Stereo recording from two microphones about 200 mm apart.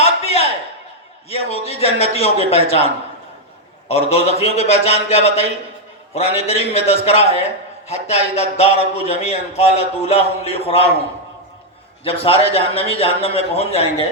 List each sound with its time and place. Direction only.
0.0 s a sound: 30° left (ahead or behind)
1.3 s a man's voice: 30° left (ahead or behind)
12.0 s a man's voice: 30° left (ahead or behind)